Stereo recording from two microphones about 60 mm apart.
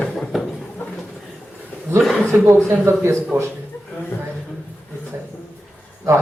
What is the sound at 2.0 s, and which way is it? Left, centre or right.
Speech, centre.